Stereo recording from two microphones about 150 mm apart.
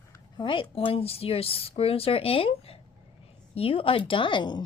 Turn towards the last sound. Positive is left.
turn(degrees=30)  # may be behind; listen again after turning